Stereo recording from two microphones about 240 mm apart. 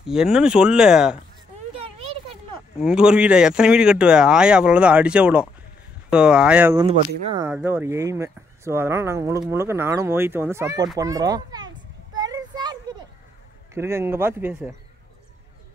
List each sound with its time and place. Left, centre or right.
0.0 s speech: centre
2.8 s speech: centre
12.2 s a sound: centre
13.7 s speech: centre